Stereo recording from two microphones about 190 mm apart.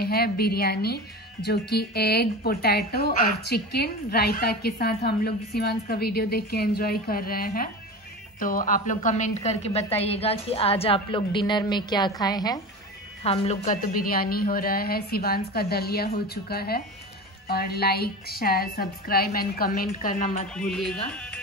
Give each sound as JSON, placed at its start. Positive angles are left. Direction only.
{"t": 0.0, "sound": "a woman's voice", "side_deg": 55}
{"t": 13.2, "sound": "a woman's voice", "side_deg": 35}
{"t": 20.7, "sound": "carnatic music", "side_deg": 0}
{"t": 21.1, "sound": "speech", "side_deg": 5}